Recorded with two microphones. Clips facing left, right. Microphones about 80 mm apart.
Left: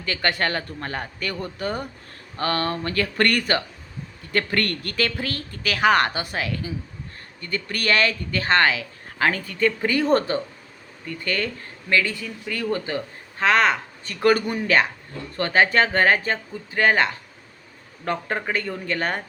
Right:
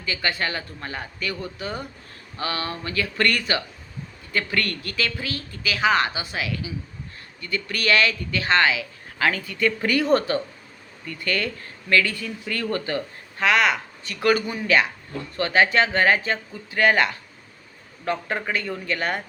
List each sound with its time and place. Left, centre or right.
0.0 s speech: left; by 13.0 s centre
13.4 s speech: left